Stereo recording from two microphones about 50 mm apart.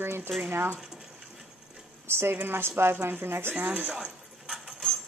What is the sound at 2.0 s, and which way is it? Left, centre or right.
Speech, right.